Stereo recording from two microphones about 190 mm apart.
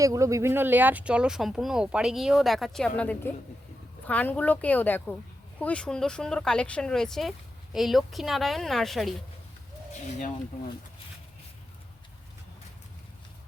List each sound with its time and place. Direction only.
0.0 s a woman's voice: 15° right (ahead or behind); by 9.1 s centre (ahead or behind)
10.1 s speech: 40° left (ahead or behind)